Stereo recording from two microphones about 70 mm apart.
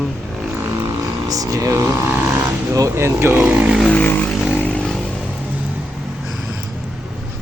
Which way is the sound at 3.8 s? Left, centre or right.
Left.